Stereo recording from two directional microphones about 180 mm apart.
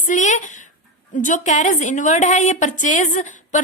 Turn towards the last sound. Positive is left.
turn(degrees=45)  # may be behind; listen again after turning